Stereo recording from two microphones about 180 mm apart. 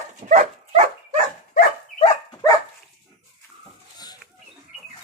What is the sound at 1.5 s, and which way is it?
Dog, 40° left (ahead or behind).